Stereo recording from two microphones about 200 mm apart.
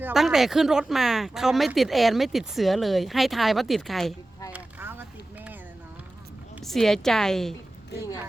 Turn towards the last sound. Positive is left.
turn(degrees=0)  # may be behind; listen again after turning